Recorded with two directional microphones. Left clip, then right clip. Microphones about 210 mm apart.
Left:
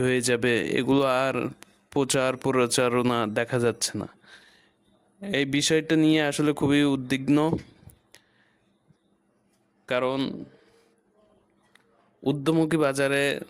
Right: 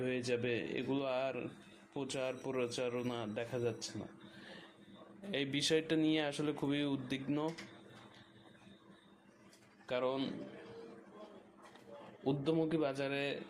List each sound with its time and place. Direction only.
0.0 s speech: 55° left (ahead or behind)
5.2 s speech: 45° left (ahead or behind)
9.8 s speech: 50° left (ahead or behind)
12.2 s speech: 55° left (ahead or behind)